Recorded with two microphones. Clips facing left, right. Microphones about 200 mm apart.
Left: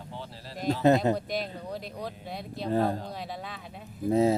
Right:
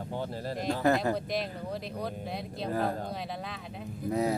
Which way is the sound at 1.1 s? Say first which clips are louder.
Left 1 dB; centre (ahead or behind).